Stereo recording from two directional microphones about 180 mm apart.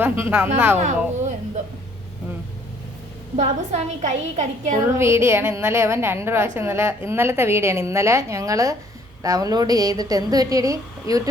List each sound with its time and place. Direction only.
0.0 s a woman's voice: 10° right (ahead or behind)
0.8 s a woman's voice: 40° right (ahead or behind)
3.3 s a woman's voice: 40° right (ahead or behind)
4.9 s a woman's voice: 15° right (ahead or behind)